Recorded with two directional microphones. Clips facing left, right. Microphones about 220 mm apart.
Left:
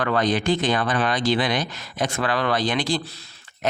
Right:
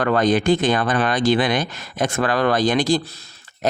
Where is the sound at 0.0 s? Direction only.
50° right (ahead or behind).